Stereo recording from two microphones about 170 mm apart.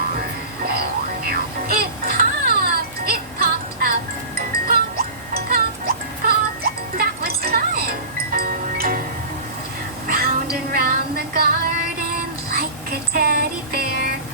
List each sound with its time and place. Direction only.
0.6 s music: 65° right (ahead or behind)
10.1 s music: 65° right (ahead or behind)
13.1 s music: 65° right (ahead or behind)